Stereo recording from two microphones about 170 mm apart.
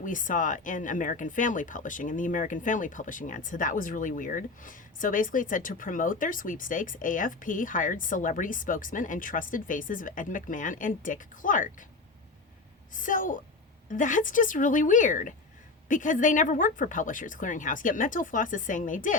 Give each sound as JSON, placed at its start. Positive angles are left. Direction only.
{"t": 0.0, "sound": "speech", "side_deg": 50}
{"t": 12.9, "sound": "speech", "side_deg": 50}